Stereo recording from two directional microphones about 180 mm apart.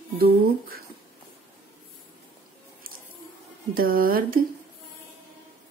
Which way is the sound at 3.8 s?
55° right (ahead or behind).